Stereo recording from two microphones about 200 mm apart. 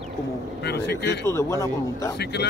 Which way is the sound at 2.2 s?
55° left (ahead or behind).